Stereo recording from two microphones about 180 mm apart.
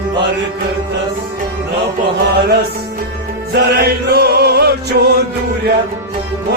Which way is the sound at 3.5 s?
60° right (ahead or behind).